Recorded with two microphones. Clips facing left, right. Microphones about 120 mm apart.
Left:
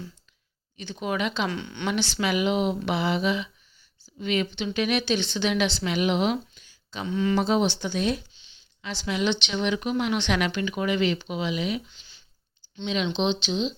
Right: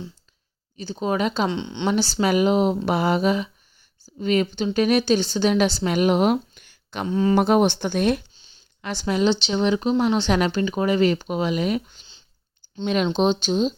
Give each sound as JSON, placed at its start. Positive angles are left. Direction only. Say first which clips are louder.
{"t": 0.8, "sound": "speech", "louder": "right 5 dB", "side_deg": -35}
{"t": 1.5, "sound": "speech", "louder": "right 5 dB", "side_deg": -25}
{"t": 1.9, "sound": "speech", "louder": "right 5 dB", "side_deg": -35}
{"t": 7.1, "sound": "speech", "louder": "right 5 dB", "side_deg": -40}
{"t": 7.3, "sound": "speech", "louder": "right 6 dB", "side_deg": -55}
{"t": 8.3, "sound": "speech", "louder": "right 3 dB", "side_deg": -40}